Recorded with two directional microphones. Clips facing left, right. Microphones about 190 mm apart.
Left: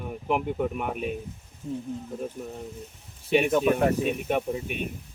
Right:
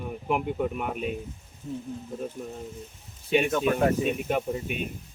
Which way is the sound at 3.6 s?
Centre (ahead or behind).